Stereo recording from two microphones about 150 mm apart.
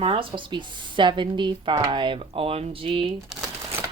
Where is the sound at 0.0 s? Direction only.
40° right (ahead or behind).